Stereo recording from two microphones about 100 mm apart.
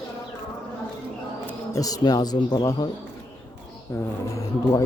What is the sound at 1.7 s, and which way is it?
Speech, 40° left (ahead or behind).